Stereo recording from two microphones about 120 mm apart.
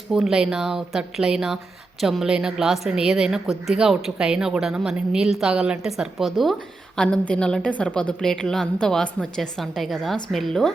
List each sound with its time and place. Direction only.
0.1 s a woman's voice: 5° right (ahead or behind)